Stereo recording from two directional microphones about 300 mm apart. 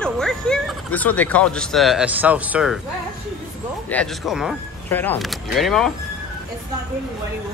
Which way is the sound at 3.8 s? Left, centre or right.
Centre.